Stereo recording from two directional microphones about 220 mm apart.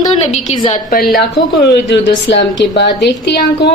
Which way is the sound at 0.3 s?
30° left (ahead or behind).